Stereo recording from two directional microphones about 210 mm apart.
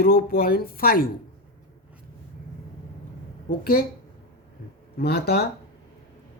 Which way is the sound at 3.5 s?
45° left (ahead or behind).